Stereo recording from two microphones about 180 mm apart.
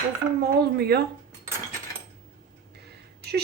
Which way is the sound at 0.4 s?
65° right (ahead or behind).